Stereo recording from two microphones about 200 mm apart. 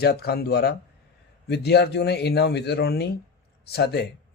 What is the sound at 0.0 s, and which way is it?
A man's voice, 50° left (ahead or behind).